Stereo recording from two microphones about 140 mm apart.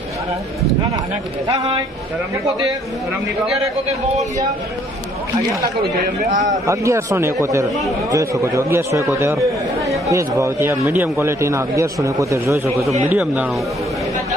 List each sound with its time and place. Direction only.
3.1 s a man's voice: 5° right (ahead or behind)
6.3 s a man's voice: 65° right (ahead or behind)
6.7 s speech: 20° right (ahead or behind)
13.1 s speech: 10° right (ahead or behind)